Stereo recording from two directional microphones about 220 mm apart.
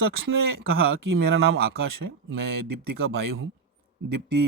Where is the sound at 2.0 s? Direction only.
60° right (ahead or behind).